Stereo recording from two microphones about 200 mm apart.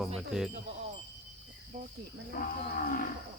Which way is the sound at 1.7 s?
40° right (ahead or behind).